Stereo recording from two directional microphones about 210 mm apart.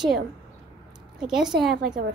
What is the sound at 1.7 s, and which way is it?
Speech, 50° right (ahead or behind).